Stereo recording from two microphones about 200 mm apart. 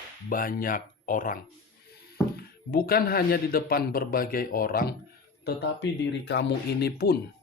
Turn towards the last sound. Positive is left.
turn(degrees=50)  # may be behind; listen again after turning